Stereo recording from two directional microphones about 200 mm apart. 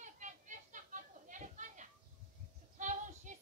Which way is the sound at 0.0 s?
40° right (ahead or behind).